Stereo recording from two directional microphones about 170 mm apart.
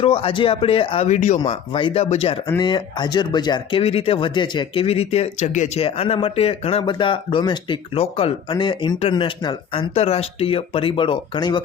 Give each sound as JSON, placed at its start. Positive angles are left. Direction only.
{"t": 0.0, "sound": "speech", "side_deg": 30}
{"t": 1.5, "sound": "speech", "side_deg": 35}